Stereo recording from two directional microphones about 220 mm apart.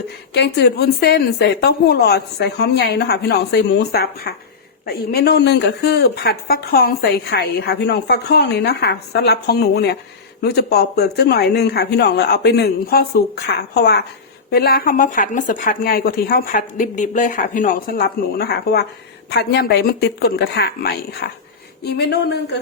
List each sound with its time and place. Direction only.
0.3 s a woman's voice: 50° left (ahead or behind)